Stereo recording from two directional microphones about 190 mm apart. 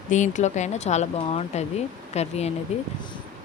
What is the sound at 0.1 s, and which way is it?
Speech, 40° left (ahead or behind).